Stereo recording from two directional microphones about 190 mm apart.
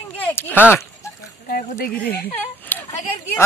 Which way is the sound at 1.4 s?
50° left (ahead or behind).